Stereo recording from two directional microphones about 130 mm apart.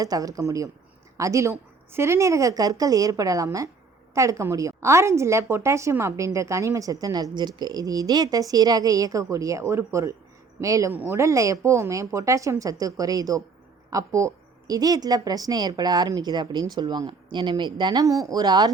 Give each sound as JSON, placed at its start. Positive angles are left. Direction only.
{"t": 0.0, "sound": "a woman's voice", "side_deg": -25}